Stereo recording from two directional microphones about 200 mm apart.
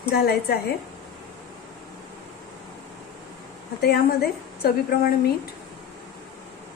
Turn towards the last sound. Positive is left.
turn(degrees=50)  # may be behind; listen again after turning